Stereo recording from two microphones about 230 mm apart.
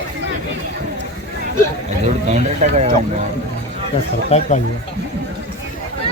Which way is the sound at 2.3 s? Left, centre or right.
Right.